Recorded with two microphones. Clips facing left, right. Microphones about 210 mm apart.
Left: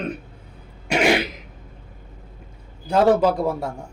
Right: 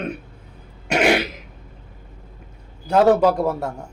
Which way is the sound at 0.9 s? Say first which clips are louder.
Right 1 dB; 5° right (ahead or behind).